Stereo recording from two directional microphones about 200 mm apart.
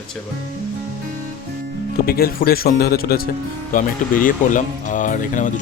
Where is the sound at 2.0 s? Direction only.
50° left (ahead or behind).